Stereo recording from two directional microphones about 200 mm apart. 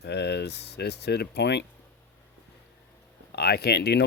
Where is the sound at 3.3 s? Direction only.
55° left (ahead or behind).